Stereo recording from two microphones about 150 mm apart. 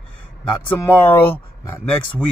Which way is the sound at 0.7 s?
15° left (ahead or behind).